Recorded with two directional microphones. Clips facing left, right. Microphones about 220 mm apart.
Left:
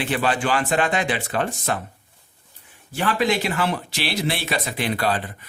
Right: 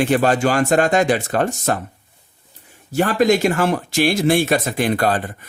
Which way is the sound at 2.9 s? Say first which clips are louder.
Right 6 dB; 45° right (ahead or behind).